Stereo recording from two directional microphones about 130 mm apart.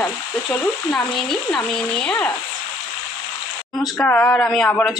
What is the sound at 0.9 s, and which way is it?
A woman's voice, 5° left (ahead or behind).